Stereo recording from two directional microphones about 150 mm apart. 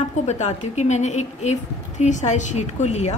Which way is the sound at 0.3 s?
50° left (ahead or behind).